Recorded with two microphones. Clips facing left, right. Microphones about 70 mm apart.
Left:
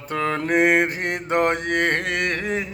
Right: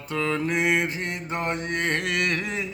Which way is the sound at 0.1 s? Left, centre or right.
Left.